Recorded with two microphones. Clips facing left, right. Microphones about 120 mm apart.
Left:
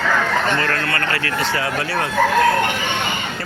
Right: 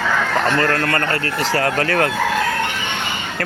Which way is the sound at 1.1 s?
35° right (ahead or behind).